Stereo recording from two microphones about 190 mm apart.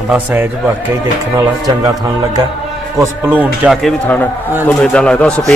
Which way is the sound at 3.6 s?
5° right (ahead or behind).